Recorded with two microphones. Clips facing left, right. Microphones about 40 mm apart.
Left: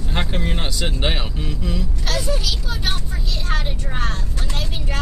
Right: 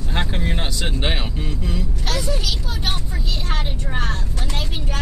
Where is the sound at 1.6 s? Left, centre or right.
Centre.